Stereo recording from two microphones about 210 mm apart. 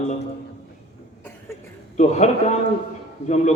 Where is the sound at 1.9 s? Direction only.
35° left (ahead or behind).